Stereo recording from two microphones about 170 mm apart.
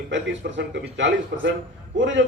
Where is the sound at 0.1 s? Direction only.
90° right.